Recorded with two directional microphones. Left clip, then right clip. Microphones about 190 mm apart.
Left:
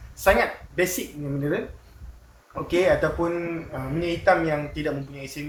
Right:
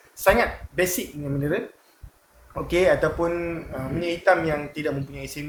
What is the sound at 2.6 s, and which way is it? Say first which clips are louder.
Speech: right 1 dB; 50° right (ahead or behind).